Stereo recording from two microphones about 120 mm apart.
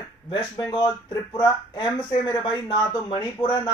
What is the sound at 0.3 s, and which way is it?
Speech, 40° left (ahead or behind).